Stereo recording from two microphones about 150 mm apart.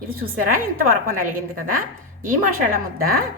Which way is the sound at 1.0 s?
70° right (ahead or behind).